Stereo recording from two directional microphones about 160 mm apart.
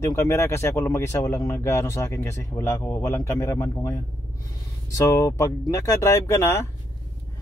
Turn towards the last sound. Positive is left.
turn(degrees=15)  # may be behind; listen again after turning